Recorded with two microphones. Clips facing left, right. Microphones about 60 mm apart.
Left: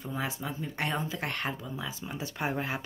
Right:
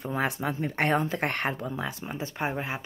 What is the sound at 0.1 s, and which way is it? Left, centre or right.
Speech, right.